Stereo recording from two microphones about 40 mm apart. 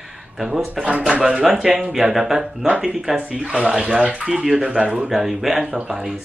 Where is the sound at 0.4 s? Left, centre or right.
Centre.